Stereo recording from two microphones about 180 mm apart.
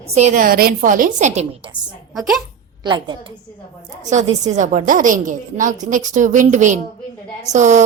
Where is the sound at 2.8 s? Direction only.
25° right (ahead or behind).